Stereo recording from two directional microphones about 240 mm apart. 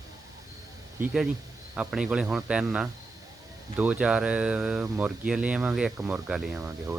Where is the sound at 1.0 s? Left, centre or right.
Centre.